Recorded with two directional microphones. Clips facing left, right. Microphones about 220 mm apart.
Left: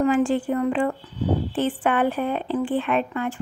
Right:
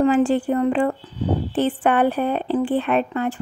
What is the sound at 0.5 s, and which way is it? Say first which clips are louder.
Speech: right 3 dB; 35° right (ahead or behind).